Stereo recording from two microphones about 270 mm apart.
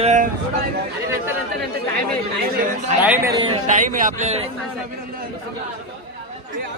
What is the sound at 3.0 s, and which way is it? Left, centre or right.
A man's voice, centre.